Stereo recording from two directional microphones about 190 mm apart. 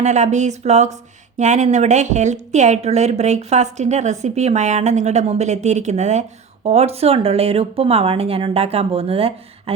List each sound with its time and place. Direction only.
0.0 s a woman's voice: 40° right (ahead or behind)